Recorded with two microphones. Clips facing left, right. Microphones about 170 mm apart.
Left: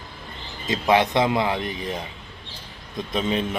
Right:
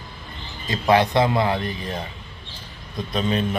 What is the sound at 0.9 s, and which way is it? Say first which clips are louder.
Speech: right 2 dB; 20° left (ahead or behind).